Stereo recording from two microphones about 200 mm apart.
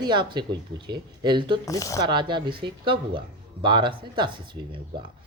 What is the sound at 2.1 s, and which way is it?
Speech, 25° right (ahead or behind).